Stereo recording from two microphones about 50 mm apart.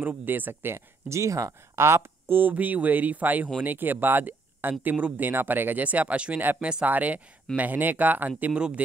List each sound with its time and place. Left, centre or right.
0.0 s speech: right
1.0 s speech: right
4.9 s speech: right
5.2 s speech: right
8.5 s speech: right